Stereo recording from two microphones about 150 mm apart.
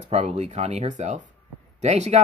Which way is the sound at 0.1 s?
50° right (ahead or behind).